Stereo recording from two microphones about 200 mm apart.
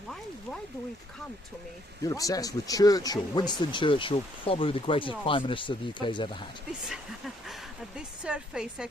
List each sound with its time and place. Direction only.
2.0 s speech: 15° left (ahead or behind)
7.9 s speech: 5° right (ahead or behind)